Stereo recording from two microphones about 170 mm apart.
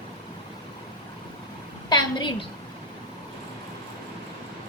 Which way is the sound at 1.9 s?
25° left (ahead or behind).